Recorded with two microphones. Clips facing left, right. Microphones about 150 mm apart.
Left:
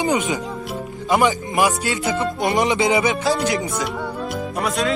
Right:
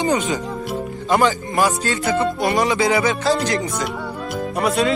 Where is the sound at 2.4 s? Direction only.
20° left (ahead or behind).